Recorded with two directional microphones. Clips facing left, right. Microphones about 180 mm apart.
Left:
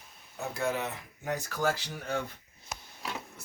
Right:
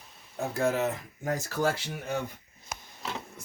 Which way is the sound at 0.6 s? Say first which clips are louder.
Right 5 dB; 45° right (ahead or behind).